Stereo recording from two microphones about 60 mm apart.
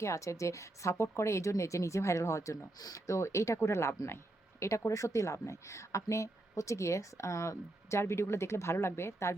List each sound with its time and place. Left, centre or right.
0.0 s a woman's voice: left